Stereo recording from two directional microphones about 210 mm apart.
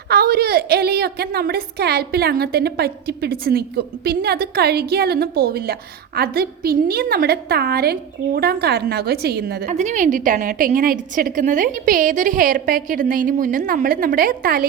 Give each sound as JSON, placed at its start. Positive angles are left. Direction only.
{"t": 0.1, "sound": "a woman's voice", "side_deg": -45}